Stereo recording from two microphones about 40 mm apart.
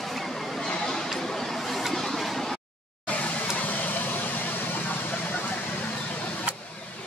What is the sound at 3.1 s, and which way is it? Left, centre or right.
Vehicle, left.